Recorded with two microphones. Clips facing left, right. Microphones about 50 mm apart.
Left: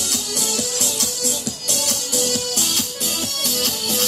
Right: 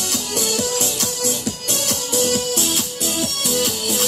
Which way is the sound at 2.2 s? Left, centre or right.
Centre.